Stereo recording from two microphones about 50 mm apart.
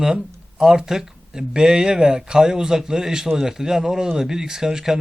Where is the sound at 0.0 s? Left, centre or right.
Centre.